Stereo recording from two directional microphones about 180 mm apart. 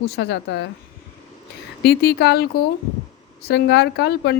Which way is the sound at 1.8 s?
65° left (ahead or behind).